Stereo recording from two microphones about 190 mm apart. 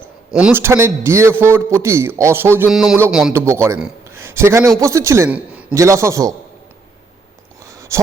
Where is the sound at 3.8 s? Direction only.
15° right (ahead or behind).